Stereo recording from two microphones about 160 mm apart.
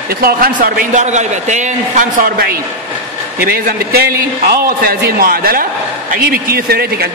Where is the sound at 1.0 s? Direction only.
45° right (ahead or behind).